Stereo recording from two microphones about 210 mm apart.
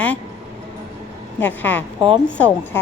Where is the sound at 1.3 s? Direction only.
10° left (ahead or behind).